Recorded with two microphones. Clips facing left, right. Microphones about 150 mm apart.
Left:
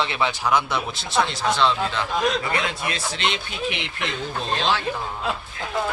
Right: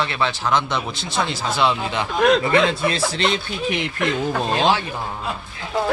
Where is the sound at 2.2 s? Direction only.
65° right (ahead or behind).